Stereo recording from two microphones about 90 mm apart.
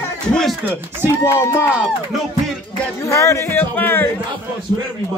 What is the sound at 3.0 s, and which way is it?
A man's voice, 30° left (ahead or behind).